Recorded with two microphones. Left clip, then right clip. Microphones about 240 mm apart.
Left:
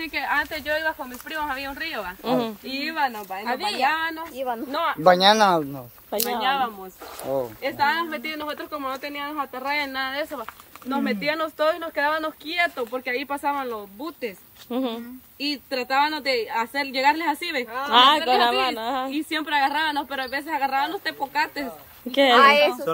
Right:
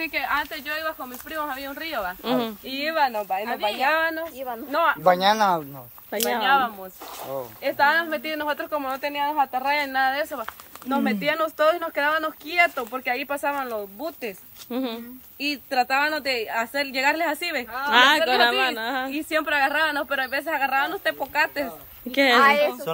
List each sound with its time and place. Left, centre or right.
0.0 s a woman's voice: centre
4.4 s speech: left
6.2 s a woman's voice: centre
14.7 s speech: centre
15.4 s a woman's voice: centre
17.7 s speech: centre
19.0 s a woman's voice: centre
22.4 s a woman's voice: left